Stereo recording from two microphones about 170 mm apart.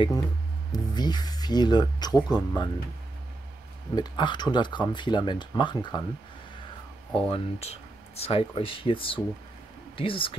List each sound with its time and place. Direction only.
0.7 s speech: 25° left (ahead or behind)
3.9 s speech: 25° left (ahead or behind)
7.2 s speech: 35° left (ahead or behind)